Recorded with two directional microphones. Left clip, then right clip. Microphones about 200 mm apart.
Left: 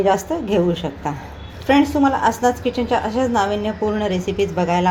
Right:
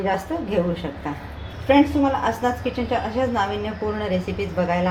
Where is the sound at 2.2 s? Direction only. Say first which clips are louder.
Left 5 dB; 50° left (ahead or behind).